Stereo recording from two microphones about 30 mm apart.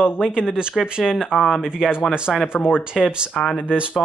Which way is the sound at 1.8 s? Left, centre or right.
Centre.